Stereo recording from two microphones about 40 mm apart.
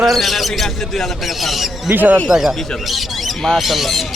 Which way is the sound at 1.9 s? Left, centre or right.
Right.